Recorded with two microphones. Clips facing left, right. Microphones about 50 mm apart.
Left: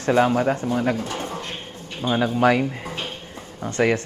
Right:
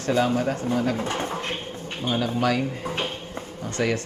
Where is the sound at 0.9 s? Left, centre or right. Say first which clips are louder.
Right 1 dB; right.